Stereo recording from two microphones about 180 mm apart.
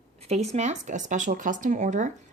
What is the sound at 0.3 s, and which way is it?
Speech, 35° right (ahead or behind).